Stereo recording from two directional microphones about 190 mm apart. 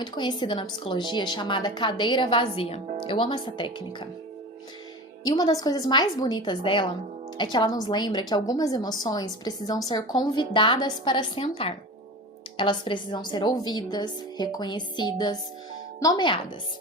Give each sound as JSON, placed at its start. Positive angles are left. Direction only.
{"t": 0.0, "sound": "a woman's voice", "side_deg": 25}
{"t": 5.2, "sound": "a woman's voice", "side_deg": 20}